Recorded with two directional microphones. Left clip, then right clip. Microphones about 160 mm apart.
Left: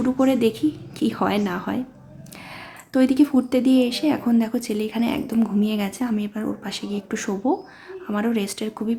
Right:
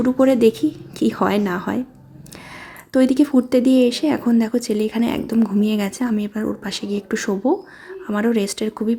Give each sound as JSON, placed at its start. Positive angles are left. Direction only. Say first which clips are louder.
{"t": 0.0, "sound": "speech", "louder": "right 5 dB", "side_deg": -25}
{"t": 2.9, "sound": "speech", "louder": "right 2 dB", "side_deg": -25}